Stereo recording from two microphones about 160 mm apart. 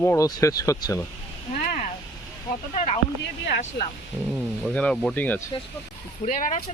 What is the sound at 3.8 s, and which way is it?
Speech, 90° left.